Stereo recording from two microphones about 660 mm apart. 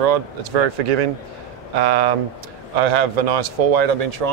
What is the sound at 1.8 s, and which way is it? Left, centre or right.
Speech, right.